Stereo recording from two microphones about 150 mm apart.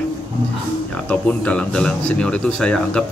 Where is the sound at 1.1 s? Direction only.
10° left (ahead or behind).